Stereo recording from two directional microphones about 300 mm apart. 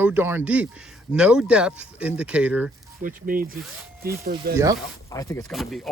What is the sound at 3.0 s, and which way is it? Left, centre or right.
Speech, right.